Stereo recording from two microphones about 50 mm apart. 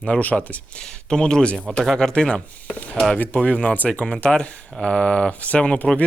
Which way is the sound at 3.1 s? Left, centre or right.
Left.